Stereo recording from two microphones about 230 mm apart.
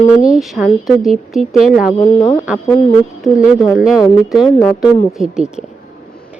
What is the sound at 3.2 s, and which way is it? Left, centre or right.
A woman's voice, centre.